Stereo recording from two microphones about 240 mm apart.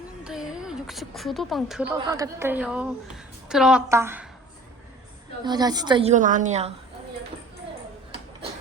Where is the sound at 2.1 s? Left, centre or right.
Centre.